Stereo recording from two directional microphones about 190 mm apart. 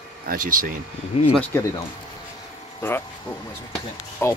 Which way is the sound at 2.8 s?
10° left (ahead or behind).